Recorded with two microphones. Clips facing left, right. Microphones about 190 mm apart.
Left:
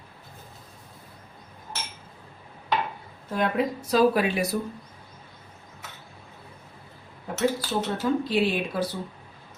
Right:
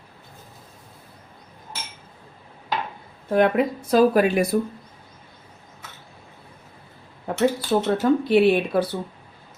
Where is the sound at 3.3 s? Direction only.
60° right (ahead or behind).